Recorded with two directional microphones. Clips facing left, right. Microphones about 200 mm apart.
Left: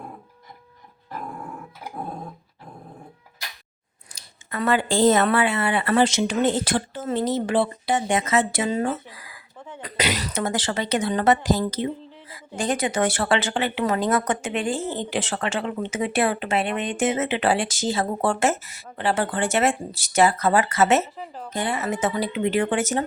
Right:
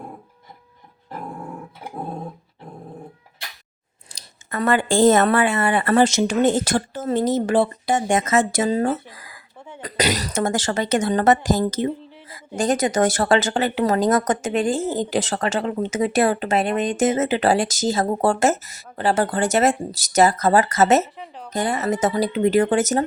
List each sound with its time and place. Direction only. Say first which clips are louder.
4.1 s a woman's voice: right 3 dB; 50° right (ahead or behind)
9.1 s a sound: right 1 dB; 45° right (ahead or behind)
9.8 s a woman's voice: right 4 dB; 40° right (ahead or behind)
21.2 s speech: left 1 dB; centre (ahead or behind)
21.5 s speech: right 4 dB; 40° right (ahead or behind)